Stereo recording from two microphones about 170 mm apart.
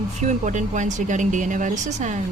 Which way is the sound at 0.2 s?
45° right (ahead or behind).